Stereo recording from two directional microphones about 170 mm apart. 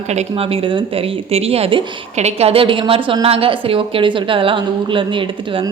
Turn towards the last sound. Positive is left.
turn(degrees=-30)  # may be behind; listen again after turning